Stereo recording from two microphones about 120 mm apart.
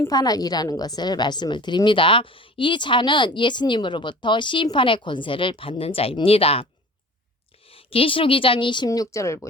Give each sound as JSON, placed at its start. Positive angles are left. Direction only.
{"t": 0.1, "sound": "a woman's voice", "side_deg": 35}
{"t": 7.7, "sound": "a woman's voice", "side_deg": 50}
{"t": 8.9, "sound": "speech", "side_deg": 25}